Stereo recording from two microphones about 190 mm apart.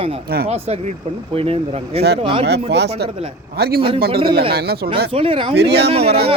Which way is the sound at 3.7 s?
30° right (ahead or behind).